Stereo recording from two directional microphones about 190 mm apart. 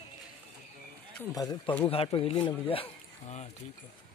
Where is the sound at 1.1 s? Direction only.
20° left (ahead or behind).